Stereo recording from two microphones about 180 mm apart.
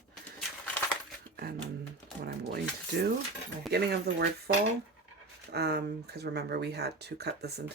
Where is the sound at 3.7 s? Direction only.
65° right (ahead or behind).